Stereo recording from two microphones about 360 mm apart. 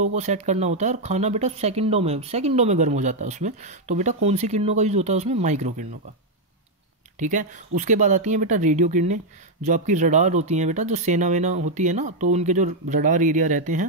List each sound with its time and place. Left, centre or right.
0.0 s speech: centre
7.2 s speech: right